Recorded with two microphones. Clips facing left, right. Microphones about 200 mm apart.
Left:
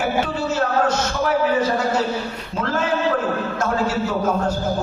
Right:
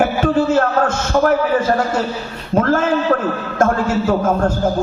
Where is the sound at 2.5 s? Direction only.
45° right (ahead or behind).